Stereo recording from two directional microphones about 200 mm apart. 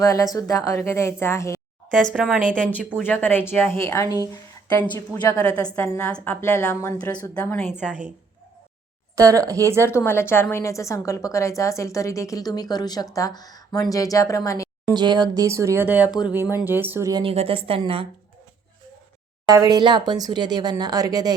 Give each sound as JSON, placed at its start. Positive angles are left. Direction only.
{"t": 0.0, "sound": "a woman's voice", "side_deg": 15}
{"t": 2.0, "sound": "speech", "side_deg": 0}
{"t": 2.6, "sound": "a woman's voice", "side_deg": 10}
{"t": 9.1, "sound": "a woman's voice", "side_deg": -15}
{"t": 9.8, "sound": "a woman's voice", "side_deg": 10}
{"t": 14.9, "sound": "a woman's voice", "side_deg": -20}
{"t": 19.5, "sound": "speech", "side_deg": -20}